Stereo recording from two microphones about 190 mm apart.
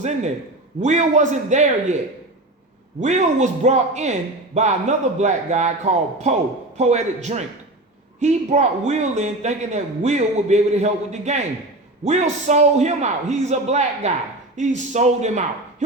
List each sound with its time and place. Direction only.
0.8 s a man's voice: 40° right (ahead or behind)
3.0 s a man's voice: 35° right (ahead or behind)